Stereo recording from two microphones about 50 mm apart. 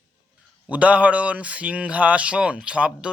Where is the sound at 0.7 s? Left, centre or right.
Right.